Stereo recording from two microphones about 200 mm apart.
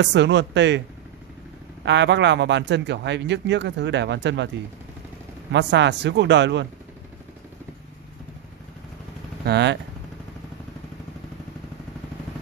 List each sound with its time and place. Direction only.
0.0 s speech: 60° right (ahead or behind)
1.9 s speech: 60° right (ahead or behind)
5.5 s speech: 60° right (ahead or behind)
9.4 s speech: 55° right (ahead or behind)